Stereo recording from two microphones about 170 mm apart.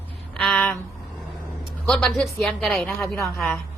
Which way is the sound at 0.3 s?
5° left (ahead or behind).